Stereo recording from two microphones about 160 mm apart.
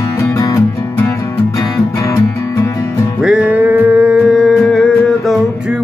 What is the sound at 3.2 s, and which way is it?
Music, 5° right (ahead or behind).